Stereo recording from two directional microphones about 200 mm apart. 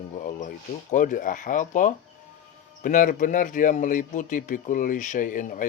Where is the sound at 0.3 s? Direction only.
40° left (ahead or behind).